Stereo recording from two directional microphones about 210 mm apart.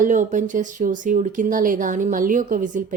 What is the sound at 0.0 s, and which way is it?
Speech, 35° right (ahead or behind).